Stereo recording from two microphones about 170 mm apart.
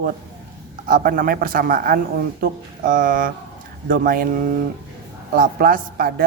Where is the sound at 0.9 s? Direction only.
55° right (ahead or behind).